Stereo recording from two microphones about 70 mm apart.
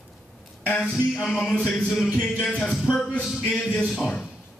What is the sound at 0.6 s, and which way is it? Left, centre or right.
A man's voice, centre.